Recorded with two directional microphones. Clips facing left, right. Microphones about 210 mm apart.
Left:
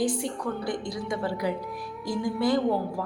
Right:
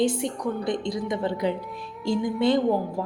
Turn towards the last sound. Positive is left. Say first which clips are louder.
# right 2 dB
turn(degrees=-20)  # may be behind; listen again after turning